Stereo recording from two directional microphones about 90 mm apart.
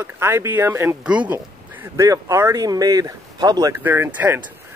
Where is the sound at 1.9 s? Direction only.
35° right (ahead or behind).